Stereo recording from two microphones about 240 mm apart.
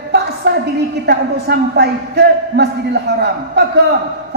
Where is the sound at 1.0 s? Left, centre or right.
Right.